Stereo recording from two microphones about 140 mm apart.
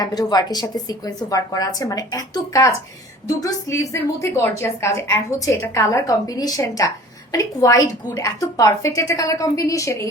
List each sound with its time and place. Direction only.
0.0 s a woman's voice: 30° left (ahead or behind)